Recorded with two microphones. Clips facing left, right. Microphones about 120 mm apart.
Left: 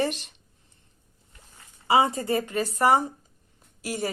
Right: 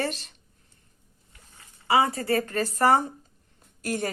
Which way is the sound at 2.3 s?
15° left (ahead or behind).